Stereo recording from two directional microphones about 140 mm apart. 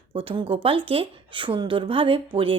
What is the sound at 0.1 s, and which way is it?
A woman's voice, 40° right (ahead or behind).